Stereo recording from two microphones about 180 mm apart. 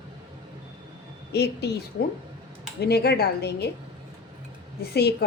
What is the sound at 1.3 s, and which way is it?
Speech, 65° left (ahead or behind).